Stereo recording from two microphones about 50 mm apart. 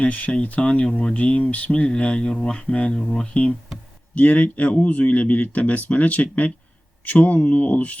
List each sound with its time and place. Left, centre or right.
0.0 s speech: left